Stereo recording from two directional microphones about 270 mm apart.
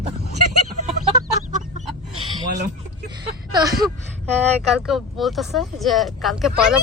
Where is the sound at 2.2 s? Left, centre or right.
Centre.